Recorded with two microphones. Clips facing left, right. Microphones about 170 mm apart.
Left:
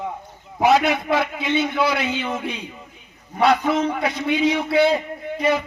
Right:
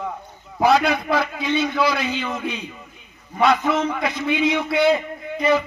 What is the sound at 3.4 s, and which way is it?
A man's voice, 35° left (ahead or behind).